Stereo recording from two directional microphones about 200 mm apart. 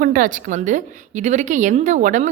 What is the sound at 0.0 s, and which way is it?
A woman's voice, 45° right (ahead or behind).